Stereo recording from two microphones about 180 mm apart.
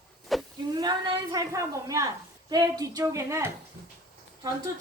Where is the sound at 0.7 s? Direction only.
25° right (ahead or behind).